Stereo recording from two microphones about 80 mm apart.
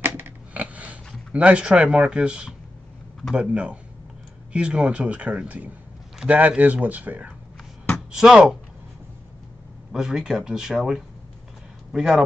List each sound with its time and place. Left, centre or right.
0.0 s a sound: right
1.3 s speech: centre
8.1 s speech: centre
9.9 s speech: centre